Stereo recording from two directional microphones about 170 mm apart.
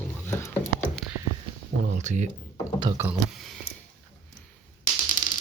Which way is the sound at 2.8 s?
25° right (ahead or behind).